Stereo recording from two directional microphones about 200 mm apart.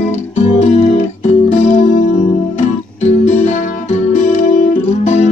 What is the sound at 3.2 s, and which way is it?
Music, 35° left (ahead or behind).